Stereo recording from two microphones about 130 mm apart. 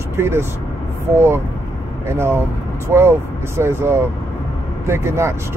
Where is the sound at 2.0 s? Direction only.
20° right (ahead or behind).